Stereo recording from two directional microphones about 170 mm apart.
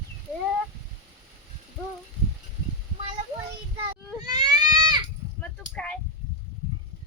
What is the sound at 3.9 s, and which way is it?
Goat, 25° right (ahead or behind).